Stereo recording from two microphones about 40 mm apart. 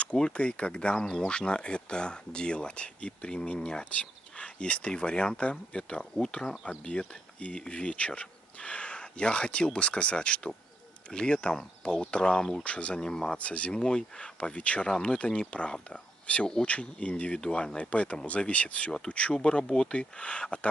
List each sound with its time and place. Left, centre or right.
0.0 s speech: left
13.0 s speech: centre
13.4 s speech: left
13.8 s speech: left
18.9 s speech: centre